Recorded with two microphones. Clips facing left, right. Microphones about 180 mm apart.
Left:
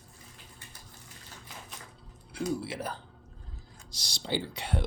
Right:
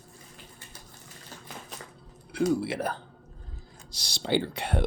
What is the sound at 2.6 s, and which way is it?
Speech, 60° right (ahead or behind).